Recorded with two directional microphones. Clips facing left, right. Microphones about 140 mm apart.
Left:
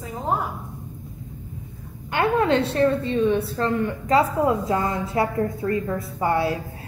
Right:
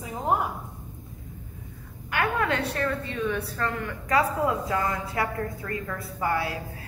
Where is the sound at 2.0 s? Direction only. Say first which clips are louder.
Left 6 dB; 25° left (ahead or behind).